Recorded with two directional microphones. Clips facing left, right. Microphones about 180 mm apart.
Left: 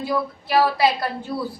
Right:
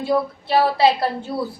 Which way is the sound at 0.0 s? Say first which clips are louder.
Right 4 dB; 25° right (ahead or behind).